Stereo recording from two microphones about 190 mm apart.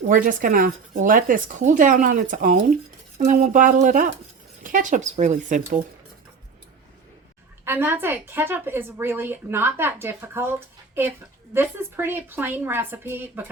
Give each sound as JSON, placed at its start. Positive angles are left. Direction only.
{"t": 0.1, "sound": "speech", "side_deg": -45}
{"t": 7.6, "sound": "a woman's voice", "side_deg": -10}
{"t": 11.5, "sound": "a woman's voice", "side_deg": -10}